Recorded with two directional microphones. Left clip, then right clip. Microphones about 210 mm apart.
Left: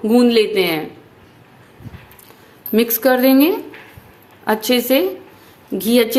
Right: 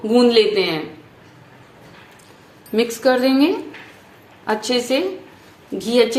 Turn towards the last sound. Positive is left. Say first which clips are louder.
# left 1 dB
turn(degrees=30)  # may be behind; listen again after turning